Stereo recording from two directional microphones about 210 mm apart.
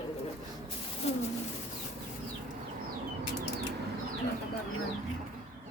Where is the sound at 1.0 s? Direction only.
30° left (ahead or behind).